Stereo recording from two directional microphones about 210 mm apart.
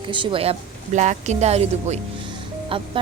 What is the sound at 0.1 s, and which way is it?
A woman's voice, 25° right (ahead or behind).